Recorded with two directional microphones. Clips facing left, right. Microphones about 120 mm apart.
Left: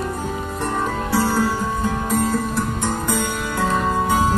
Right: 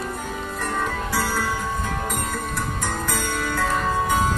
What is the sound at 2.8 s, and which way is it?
Music, 20° left (ahead or behind).